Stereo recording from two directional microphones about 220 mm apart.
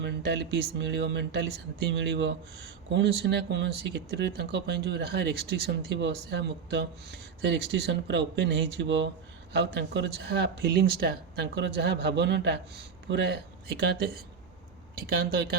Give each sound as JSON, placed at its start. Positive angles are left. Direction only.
{"t": 0.0, "sound": "speech", "side_deg": -50}